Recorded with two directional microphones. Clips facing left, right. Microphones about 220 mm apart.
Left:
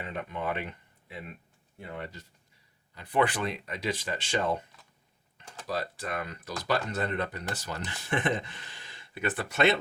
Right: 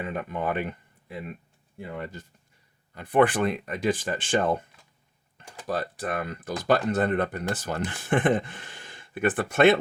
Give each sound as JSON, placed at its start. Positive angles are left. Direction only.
{"t": 0.0, "sound": "speech", "side_deg": -50}
{"t": 2.9, "sound": "speech", "side_deg": -50}
{"t": 5.6, "sound": "speech", "side_deg": -50}